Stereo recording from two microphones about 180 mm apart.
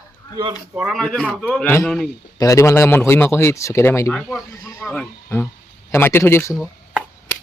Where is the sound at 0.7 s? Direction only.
Centre (ahead or behind).